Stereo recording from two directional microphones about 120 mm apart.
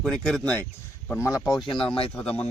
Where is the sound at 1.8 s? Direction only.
45° left (ahead or behind).